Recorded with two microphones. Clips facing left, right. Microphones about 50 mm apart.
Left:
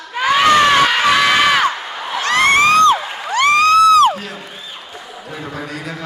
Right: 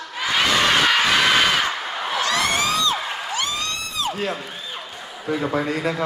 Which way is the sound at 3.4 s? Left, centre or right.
Left.